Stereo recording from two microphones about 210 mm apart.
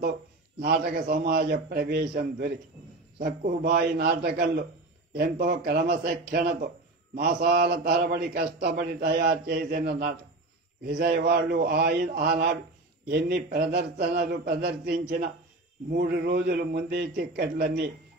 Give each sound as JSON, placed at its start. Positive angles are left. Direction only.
{"t": 0.6, "sound": "a man's voice", "side_deg": -50}